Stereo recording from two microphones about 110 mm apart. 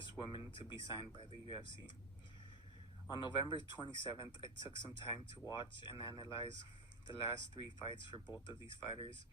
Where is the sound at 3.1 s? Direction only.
45° left (ahead or behind).